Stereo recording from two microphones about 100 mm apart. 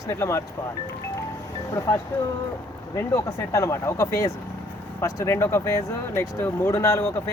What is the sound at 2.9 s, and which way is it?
Speech, 30° left (ahead or behind).